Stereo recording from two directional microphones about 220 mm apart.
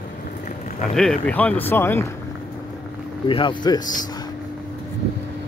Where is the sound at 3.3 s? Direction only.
20° left (ahead or behind).